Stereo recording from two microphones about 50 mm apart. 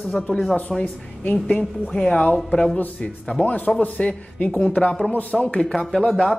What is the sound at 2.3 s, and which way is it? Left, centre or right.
Speech, centre.